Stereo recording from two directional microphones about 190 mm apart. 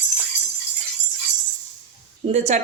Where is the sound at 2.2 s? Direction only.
35° right (ahead or behind).